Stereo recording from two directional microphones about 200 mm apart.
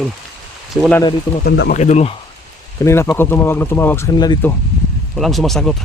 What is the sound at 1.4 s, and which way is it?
Speech, 65° left (ahead or behind).